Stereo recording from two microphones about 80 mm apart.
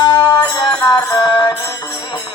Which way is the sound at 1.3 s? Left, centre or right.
Left.